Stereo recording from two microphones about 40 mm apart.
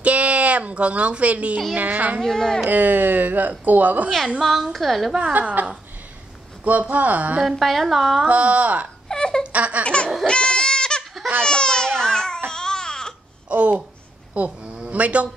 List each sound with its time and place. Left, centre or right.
0.0 s speech: right
2.2 s speech: centre
2.7 s speech: right
4.4 s a woman's voice: centre
5.6 s speech: right
7.4 s a woman's voice: centre
8.3 s speech: right
9.1 s a sound: centre
9.4 s baby laughter: right
9.8 s baby laughter: left
10.2 s goat: left
11.4 s babbling: centre
12.4 s baby cry: centre
13.5 s speech: right